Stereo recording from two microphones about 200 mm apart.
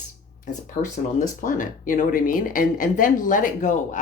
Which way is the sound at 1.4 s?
40° left (ahead or behind).